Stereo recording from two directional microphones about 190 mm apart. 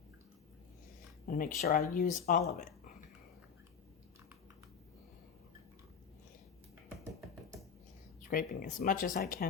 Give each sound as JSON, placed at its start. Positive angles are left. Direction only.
{"t": 1.3, "sound": "speech", "side_deg": 50}
{"t": 8.3, "sound": "speech", "side_deg": 45}